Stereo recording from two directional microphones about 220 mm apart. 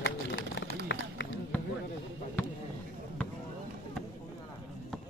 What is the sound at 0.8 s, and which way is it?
Run, 50° left (ahead or behind).